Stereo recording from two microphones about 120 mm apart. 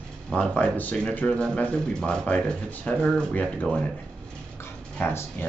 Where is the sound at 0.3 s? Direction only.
10° left (ahead or behind).